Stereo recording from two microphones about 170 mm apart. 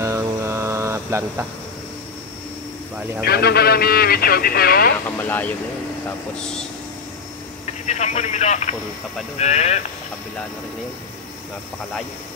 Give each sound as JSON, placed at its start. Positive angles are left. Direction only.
{"t": 0.0, "sound": "mantra", "side_deg": -15}
{"t": 3.3, "sound": "speech", "side_deg": 70}
{"t": 5.2, "sound": "speech", "side_deg": 10}
{"t": 7.8, "sound": "speech", "side_deg": 40}